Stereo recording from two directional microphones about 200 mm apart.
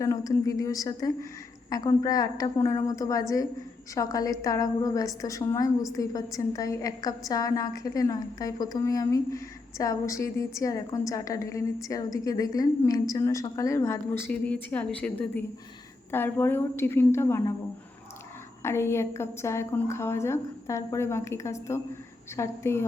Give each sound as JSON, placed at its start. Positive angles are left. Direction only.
{"t": 0.0, "sound": "a woman's voice", "side_deg": 15}
{"t": 18.6, "sound": "a woman's voice", "side_deg": 15}